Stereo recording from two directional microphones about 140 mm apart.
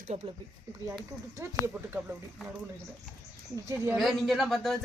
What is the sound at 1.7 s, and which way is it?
Speech, 10° right (ahead or behind).